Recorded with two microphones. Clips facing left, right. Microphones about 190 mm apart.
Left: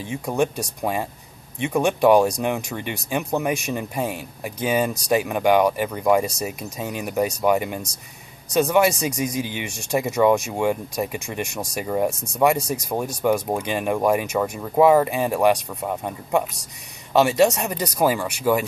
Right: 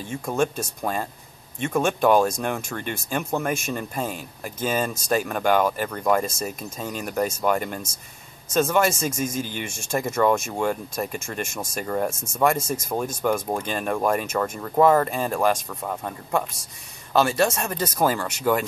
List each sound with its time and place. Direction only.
0.1 s speech: 15° left (ahead or behind)